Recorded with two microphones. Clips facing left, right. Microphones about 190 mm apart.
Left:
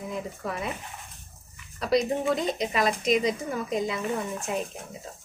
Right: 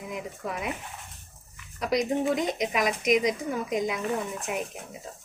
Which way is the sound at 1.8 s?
15° right (ahead or behind).